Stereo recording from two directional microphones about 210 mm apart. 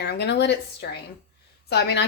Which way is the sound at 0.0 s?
50° left (ahead or behind).